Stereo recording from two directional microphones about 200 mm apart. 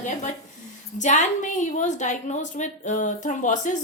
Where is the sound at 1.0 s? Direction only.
35° left (ahead or behind).